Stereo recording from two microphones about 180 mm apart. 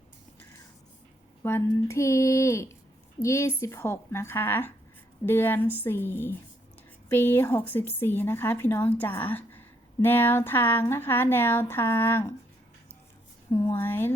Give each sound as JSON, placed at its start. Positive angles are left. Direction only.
{"t": 1.4, "sound": "speech", "side_deg": 15}
{"t": 13.7, "sound": "speech", "side_deg": 10}